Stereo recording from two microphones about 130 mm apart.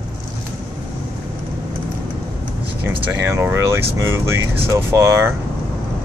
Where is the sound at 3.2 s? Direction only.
20° right (ahead or behind).